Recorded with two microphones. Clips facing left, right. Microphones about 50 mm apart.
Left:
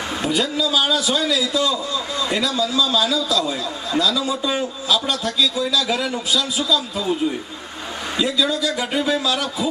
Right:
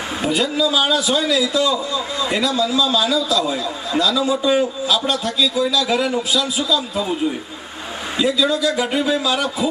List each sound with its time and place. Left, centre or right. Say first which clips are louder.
0.2 s a man's voice: right 3 dB; centre
9.2 s a man's voice: right 2 dB; centre